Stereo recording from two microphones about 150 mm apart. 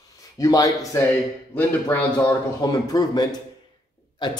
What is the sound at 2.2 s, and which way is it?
A man's voice, 25° left (ahead or behind).